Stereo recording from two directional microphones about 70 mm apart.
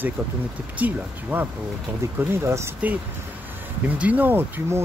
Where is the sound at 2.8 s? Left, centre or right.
Centre.